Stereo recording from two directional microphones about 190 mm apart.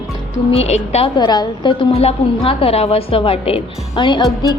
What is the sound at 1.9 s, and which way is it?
A woman's voice, 35° left (ahead or behind).